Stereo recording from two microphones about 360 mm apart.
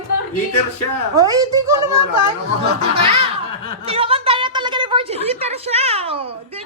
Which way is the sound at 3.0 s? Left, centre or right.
Centre.